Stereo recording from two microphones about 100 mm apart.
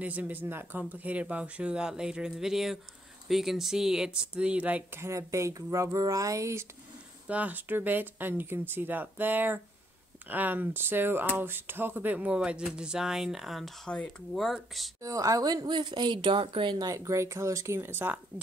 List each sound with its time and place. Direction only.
0.0 s speech: 15° right (ahead or behind)
5.0 s speech: 30° right (ahead or behind)
7.2 s speech: 15° right (ahead or behind)
15.0 s a woman's voice: 35° right (ahead or behind); by 16.7 s 55° right (ahead or behind)
16.7 s speech: 35° right (ahead or behind)